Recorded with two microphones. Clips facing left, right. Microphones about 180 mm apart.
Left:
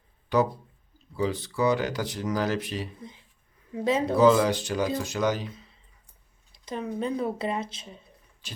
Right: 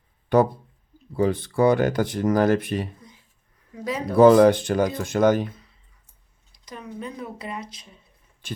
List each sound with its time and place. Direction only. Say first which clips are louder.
0.3 s speech: right 5 dB; 50° right (ahead or behind)
3.8 s speech: left 4 dB; 25° left (ahead or behind)
4.1 s speech: right 8 dB; 55° right (ahead or behind)
6.5 s speech: left 5 dB; 25° left (ahead or behind)
8.4 s speech: right 10 dB; 55° right (ahead or behind)